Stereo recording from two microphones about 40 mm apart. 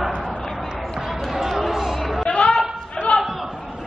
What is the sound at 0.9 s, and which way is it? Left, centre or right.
Basketball bounce, centre.